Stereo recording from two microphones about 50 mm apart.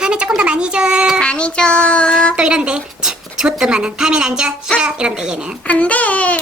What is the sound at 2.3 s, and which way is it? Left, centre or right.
Speech, centre.